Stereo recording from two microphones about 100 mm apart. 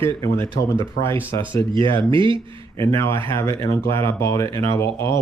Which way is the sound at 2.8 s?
30° left (ahead or behind).